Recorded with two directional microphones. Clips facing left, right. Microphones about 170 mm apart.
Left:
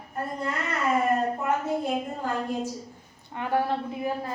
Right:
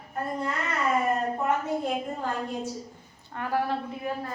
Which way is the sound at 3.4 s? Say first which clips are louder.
Left 2 dB; 25° left (ahead or behind).